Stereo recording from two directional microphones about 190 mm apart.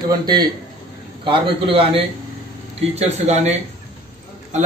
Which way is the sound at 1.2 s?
25° right (ahead or behind).